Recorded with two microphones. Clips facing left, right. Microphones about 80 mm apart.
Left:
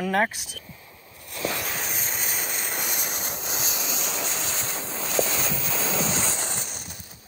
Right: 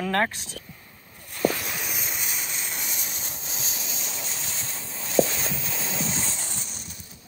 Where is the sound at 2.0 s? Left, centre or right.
Left.